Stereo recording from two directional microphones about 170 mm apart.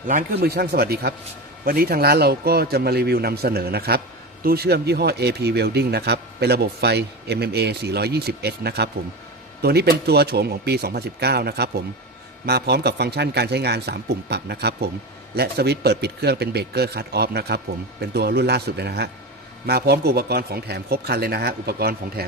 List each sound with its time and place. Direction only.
0.3 s a man's voice: 70° right (ahead or behind)